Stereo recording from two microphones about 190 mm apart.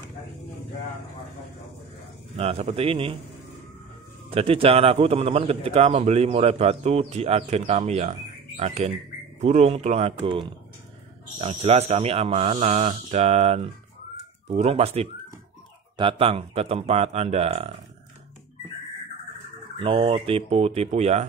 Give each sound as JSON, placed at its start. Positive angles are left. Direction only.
{"t": 2.3, "sound": "speech", "side_deg": -35}
{"t": 4.3, "sound": "speech", "side_deg": -30}
{"t": 19.8, "sound": "speech", "side_deg": -30}